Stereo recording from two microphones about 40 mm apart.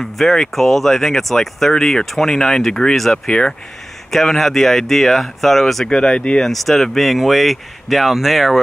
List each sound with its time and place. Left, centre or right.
0.0 s speech: centre
3.3 s speech: left
4.1 s speech: centre
5.9 s speech: left
6.4 s speech: centre